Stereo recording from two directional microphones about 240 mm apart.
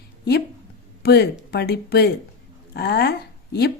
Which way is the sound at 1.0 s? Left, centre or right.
Left.